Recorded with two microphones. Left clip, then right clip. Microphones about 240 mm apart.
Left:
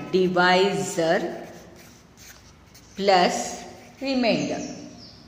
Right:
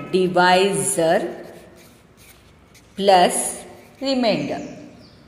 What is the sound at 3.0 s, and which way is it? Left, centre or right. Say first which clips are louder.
Speech: right 5 dB; centre.